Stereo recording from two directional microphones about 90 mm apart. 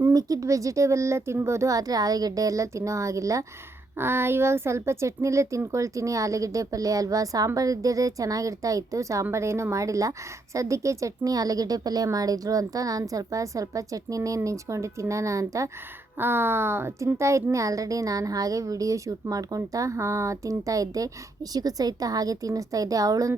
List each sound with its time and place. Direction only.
0.1 s a woman's voice: 45° right (ahead or behind)
16.1 s a woman's voice: 25° right (ahead or behind); by 23.3 s 40° right (ahead or behind)